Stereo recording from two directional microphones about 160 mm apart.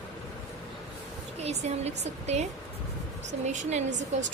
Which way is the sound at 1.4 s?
45° right (ahead or behind).